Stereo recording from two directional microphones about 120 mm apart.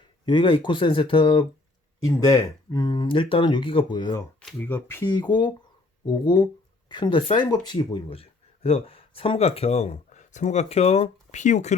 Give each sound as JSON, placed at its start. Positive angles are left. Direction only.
{"t": 0.3, "sound": "speech", "side_deg": 40}
{"t": 2.0, "sound": "speech", "side_deg": 25}
{"t": 4.5, "sound": "speech", "side_deg": 20}
{"t": 5.0, "sound": "speech", "side_deg": 35}